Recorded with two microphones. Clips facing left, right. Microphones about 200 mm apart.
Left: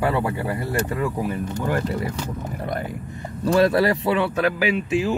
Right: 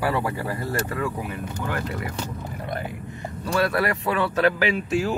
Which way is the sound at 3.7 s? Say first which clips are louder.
Left 5 dB; 30° left (ahead or behind).